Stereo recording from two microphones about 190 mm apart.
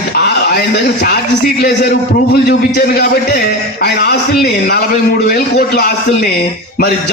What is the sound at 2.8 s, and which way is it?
A man's voice, 55° left (ahead or behind).